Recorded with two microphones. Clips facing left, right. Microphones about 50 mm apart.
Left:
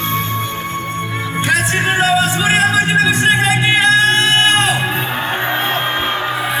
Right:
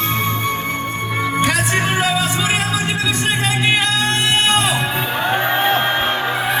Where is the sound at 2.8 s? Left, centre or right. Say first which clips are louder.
Left 6 dB; left.